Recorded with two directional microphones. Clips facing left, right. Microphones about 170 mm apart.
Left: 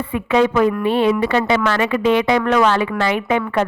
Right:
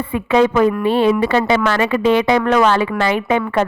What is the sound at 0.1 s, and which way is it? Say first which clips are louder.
A woman's voice: right 2 dB; 30° right (ahead or behind).